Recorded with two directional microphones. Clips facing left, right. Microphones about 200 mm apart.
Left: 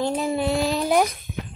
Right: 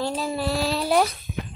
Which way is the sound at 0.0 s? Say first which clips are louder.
Left 3 dB; 20° left (ahead or behind).